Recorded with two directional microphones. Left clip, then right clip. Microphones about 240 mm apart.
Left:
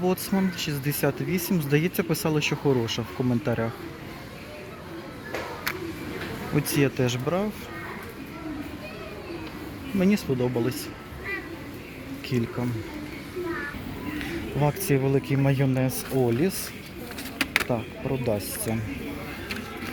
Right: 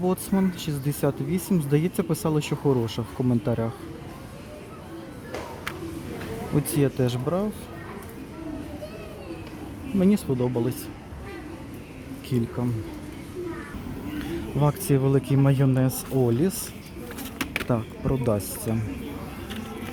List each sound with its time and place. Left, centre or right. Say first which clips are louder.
0.0 s speech: even; centre
6.7 s speech: left 1 dB; centre
10.0 s speech: right 1 dB; centre
12.3 s speech: even; centre
14.6 s speech: even; centre